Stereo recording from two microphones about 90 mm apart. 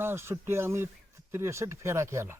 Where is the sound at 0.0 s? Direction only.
30° right (ahead or behind).